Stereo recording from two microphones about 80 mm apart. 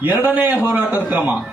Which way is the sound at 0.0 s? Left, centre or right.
Right.